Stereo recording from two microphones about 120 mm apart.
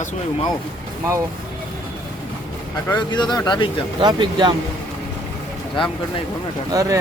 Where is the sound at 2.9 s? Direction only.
40° left (ahead or behind).